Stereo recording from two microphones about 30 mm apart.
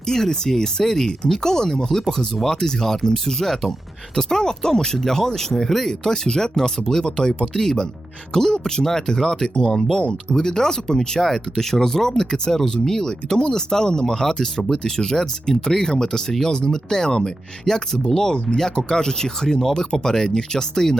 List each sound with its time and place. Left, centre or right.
0.0 s speech: centre
5.9 s speech: left
7.5 s speech: centre